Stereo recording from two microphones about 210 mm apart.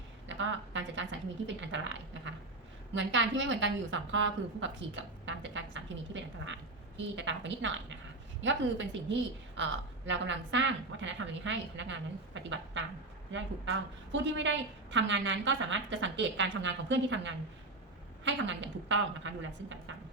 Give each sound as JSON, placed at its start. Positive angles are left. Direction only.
{"t": 0.3, "sound": "a sound", "side_deg": -60}
{"t": 1.6, "sound": "a woman's voice", "side_deg": -60}
{"t": 10.1, "sound": "a woman's voice", "side_deg": -60}